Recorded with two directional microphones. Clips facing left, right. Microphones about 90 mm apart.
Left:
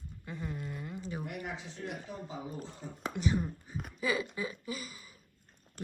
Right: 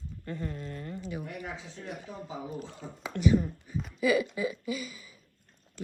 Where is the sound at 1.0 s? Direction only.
35° left (ahead or behind).